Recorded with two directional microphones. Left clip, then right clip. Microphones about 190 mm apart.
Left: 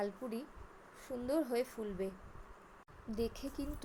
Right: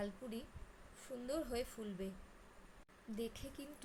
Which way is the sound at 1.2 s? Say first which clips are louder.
Left 7 dB; 20° left (ahead or behind).